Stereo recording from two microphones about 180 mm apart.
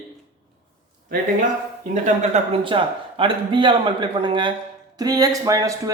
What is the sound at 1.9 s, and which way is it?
A man's voice, 40° right (ahead or behind).